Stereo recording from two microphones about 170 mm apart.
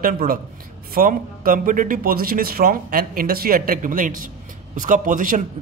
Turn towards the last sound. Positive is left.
turn(degrees=-50)  # may be behind; listen again after turning